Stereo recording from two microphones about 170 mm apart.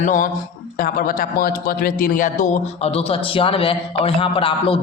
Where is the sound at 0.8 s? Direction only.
60° left (ahead or behind).